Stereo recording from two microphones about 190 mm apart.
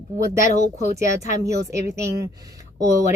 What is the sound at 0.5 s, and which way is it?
Speech, 40° left (ahead or behind).